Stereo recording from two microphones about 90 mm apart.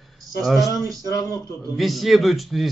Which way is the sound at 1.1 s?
40° left (ahead or behind).